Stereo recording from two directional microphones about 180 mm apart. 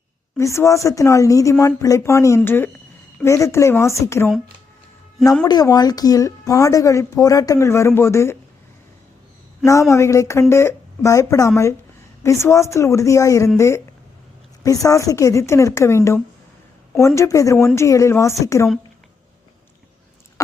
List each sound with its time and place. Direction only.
0.3 s speech: 15° left (ahead or behind)
5.5 s speech: 20° left (ahead or behind)
9.9 s speech: 15° left (ahead or behind)